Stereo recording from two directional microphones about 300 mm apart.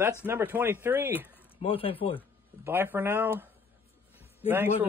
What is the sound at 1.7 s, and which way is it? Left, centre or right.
Speech, centre.